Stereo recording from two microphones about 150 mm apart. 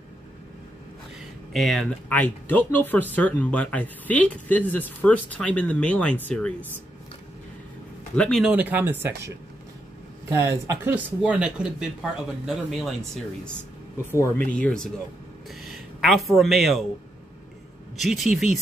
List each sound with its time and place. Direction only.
1.5 s speech: centre (ahead or behind)
8.2 s speech: 5° left (ahead or behind)
8.5 s speech: 10° right (ahead or behind)
14.1 s speech: 15° left (ahead or behind); by 16.8 s centre (ahead or behind)
17.9 s speech: centre (ahead or behind)